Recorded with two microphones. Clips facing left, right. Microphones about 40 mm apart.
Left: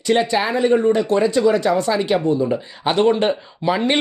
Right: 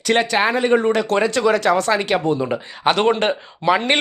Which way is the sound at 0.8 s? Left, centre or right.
Right.